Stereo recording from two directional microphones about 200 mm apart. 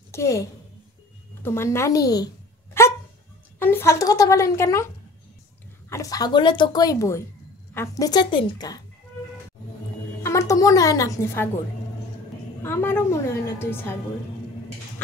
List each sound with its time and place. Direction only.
0.1 s a woman's voice: 15° left (ahead or behind)
5.9 s a woman's voice: 15° left (ahead or behind)
10.2 s a woman's voice: 15° left (ahead or behind)
12.6 s a woman's voice: 10° left (ahead or behind)